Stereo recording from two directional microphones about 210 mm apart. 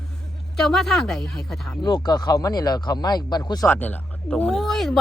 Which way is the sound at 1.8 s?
20° left (ahead or behind).